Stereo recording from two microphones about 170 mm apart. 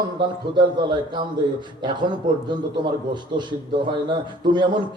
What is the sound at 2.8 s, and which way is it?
A man's voice, 25° right (ahead or behind).